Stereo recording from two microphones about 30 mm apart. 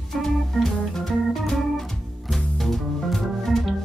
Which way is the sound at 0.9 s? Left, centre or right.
Centre.